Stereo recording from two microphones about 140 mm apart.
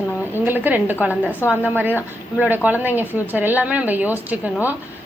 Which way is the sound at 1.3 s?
15° left (ahead or behind).